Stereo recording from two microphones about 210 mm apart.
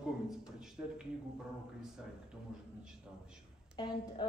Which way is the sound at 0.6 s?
5° right (ahead or behind).